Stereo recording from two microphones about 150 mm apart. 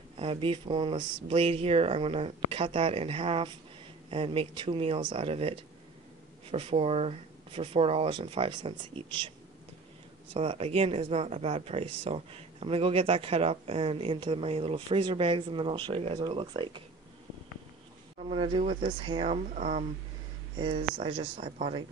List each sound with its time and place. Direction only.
0.2 s speech: 35° right (ahead or behind)
10.3 s speech: 40° right (ahead or behind)
18.3 s speech: 35° right (ahead or behind)